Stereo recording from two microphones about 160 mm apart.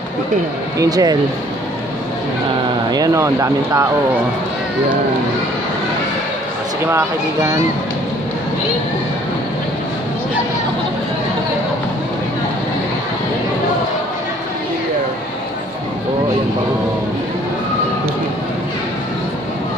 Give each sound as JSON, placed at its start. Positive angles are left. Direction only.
{"t": 0.7, "sound": "speech", "side_deg": -25}
{"t": 2.9, "sound": "speech", "side_deg": -20}